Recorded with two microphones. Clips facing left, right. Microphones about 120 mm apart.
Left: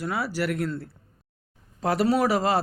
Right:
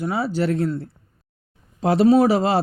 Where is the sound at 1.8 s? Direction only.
25° right (ahead or behind).